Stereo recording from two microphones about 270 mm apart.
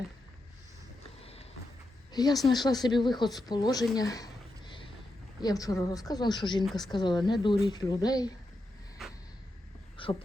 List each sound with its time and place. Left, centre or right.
1.2 s a sound: left
2.1 s a woman's voice: centre
10.0 s crow: centre